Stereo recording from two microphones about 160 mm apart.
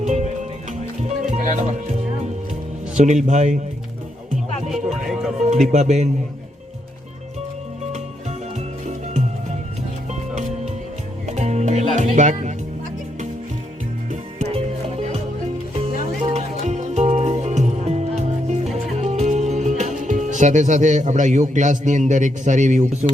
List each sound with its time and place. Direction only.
0.0 s music: 45° right (ahead or behind)
2.9 s speech: 45° right (ahead or behind)
4.7 s music: 5° right (ahead or behind)
5.5 s speech: 45° right (ahead or behind)
11.3 s speech: 45° right (ahead or behind)
14.1 s music: 45° right (ahead or behind)
16.0 s music: 45° right (ahead or behind)
18.9 s speech: 45° right (ahead or behind)